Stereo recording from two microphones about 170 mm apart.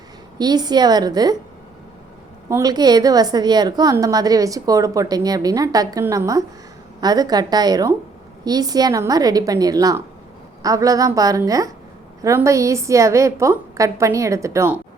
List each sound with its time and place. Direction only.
0.3 s a woman's voice: 25° right (ahead or behind)
2.5 s a woman's voice: 20° right (ahead or behind)